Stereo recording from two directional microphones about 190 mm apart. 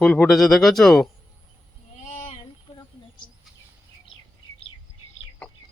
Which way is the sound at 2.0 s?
40° left (ahead or behind).